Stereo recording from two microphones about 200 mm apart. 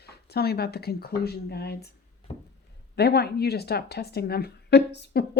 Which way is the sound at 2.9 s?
55° left (ahead or behind).